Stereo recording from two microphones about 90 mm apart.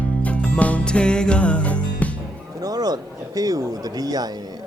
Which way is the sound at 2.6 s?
45° right (ahead or behind).